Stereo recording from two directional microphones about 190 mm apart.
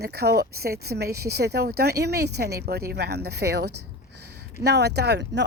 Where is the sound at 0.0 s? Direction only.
60° right (ahead or behind).